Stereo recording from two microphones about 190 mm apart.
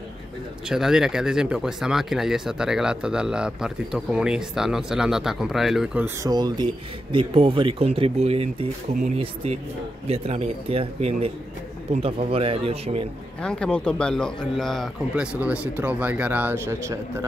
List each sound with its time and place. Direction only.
0.7 s speech: centre (ahead or behind)
6.0 s speech: 20° right (ahead or behind)
13.4 s a man's voice: 5° left (ahead or behind); by 17.0 s 15° right (ahead or behind)